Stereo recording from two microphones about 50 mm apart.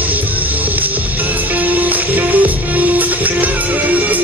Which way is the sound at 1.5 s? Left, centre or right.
Right.